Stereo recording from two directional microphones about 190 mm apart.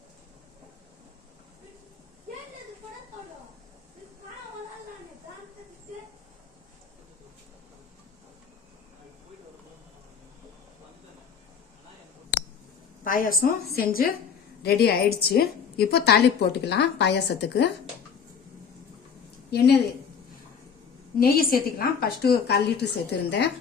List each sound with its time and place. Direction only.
13.1 s a woman's voice: 50° left (ahead or behind)
19.5 s a woman's voice: 60° left (ahead or behind)
21.2 s a woman's voice: 50° left (ahead or behind)